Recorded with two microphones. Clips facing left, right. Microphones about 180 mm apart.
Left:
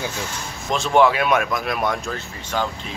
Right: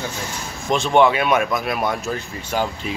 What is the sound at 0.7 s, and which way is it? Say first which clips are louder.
Speech: right 1 dB; centre (ahead or behind).